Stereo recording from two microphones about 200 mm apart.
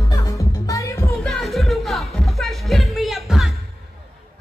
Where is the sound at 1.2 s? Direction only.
Centre (ahead or behind).